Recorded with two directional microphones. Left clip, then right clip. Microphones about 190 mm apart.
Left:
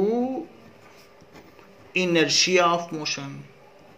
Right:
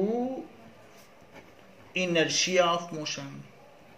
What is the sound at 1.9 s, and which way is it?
Speech, 50° left (ahead or behind).